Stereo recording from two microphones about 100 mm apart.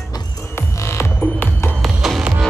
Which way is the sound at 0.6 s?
30° left (ahead or behind).